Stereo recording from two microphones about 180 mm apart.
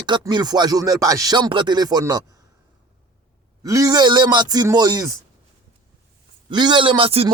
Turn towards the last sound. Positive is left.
turn(degrees=-30)  # may be behind; listen again after turning